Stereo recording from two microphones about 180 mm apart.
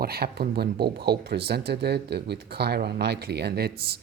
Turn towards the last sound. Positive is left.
turn(degrees=-60)  # may be behind; listen again after turning